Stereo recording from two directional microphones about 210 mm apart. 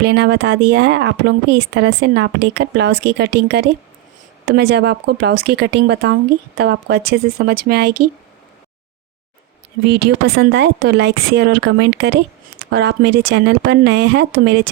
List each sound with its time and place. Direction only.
0.0 s speech: 55° right (ahead or behind)
9.8 s speech: 50° right (ahead or behind)